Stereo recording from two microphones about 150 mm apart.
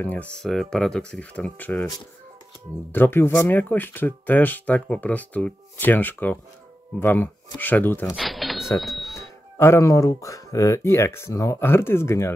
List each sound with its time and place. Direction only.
0.0 s speech: 10° left (ahead or behind)
2.9 s speech: 15° left (ahead or behind)
8.2 s cash register: centre (ahead or behind)
9.6 s speech: 20° left (ahead or behind)